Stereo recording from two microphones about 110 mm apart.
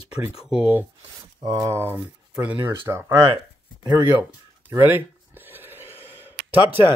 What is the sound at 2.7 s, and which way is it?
Speech, 25° right (ahead or behind).